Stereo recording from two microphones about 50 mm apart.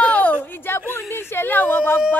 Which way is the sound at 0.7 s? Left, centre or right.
Left.